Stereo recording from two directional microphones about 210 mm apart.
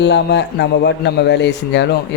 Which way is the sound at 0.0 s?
55° left (ahead or behind).